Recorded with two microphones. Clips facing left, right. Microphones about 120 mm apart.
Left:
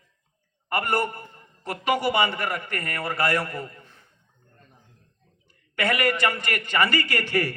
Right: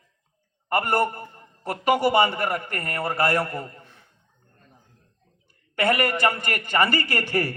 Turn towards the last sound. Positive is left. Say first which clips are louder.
# even
turn(degrees=-40)  # may be behind; listen again after turning